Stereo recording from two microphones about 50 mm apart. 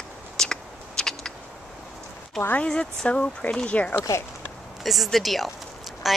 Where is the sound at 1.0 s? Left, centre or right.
Centre.